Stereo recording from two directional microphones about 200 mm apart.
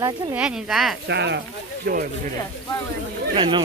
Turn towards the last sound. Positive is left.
turn(degrees=-25)  # may be behind; listen again after turning